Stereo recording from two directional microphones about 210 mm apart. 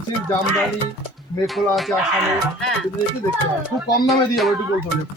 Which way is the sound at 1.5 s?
Centre (ahead or behind).